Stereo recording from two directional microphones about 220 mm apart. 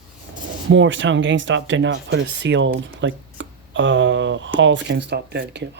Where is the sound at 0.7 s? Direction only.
60° right (ahead or behind).